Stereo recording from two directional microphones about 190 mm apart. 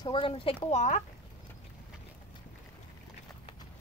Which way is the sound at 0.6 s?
40° left (ahead or behind).